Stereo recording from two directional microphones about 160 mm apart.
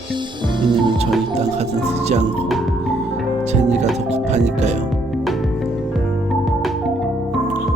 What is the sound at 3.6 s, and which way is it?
Music, 45° right (ahead or behind).